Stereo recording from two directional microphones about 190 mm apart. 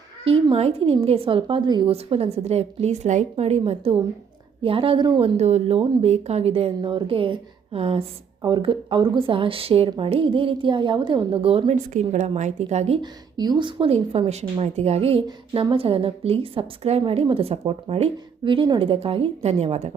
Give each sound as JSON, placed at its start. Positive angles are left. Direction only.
{"t": 0.3, "sound": "a woman's voice", "side_deg": -30}